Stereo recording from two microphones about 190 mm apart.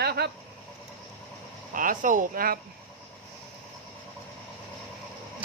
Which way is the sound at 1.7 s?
45° right (ahead or behind).